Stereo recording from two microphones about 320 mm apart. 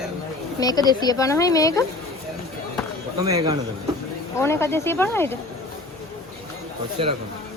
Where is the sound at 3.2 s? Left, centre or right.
Centre.